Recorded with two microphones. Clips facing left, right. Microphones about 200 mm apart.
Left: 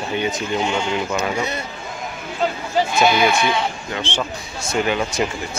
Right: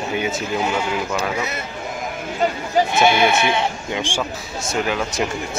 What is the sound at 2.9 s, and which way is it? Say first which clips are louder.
Speech: left 1 dB; 20° right (ahead or behind).